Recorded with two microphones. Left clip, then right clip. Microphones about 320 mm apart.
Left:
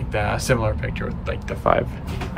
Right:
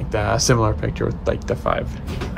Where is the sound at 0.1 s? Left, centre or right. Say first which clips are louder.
Right 3 dB; centre.